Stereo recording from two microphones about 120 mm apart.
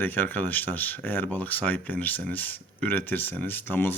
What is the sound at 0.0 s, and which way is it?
Speech, 15° left (ahead or behind).